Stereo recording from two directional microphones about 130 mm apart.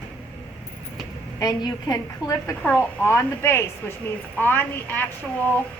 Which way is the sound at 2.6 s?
15° left (ahead or behind).